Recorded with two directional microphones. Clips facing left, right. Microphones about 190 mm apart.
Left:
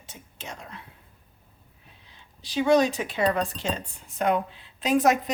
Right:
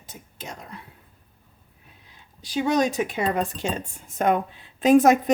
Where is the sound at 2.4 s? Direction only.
45° right (ahead or behind).